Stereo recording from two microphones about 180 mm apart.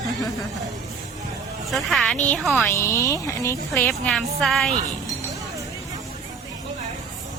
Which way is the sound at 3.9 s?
5° left (ahead or behind).